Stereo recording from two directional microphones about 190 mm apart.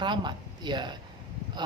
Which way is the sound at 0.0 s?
25° right (ahead or behind).